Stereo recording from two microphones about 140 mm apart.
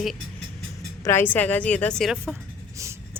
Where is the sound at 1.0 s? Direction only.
15° left (ahead or behind).